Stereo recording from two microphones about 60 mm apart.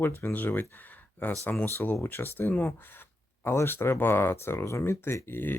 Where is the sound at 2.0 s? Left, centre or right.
Left.